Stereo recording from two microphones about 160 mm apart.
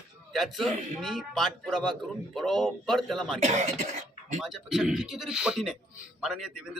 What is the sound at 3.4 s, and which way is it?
Speech, 45° right (ahead or behind).